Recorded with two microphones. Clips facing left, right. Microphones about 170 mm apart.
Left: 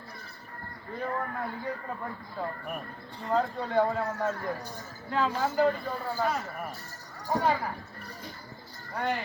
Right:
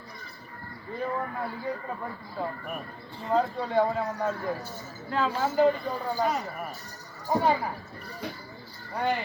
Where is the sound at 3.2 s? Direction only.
10° right (ahead or behind).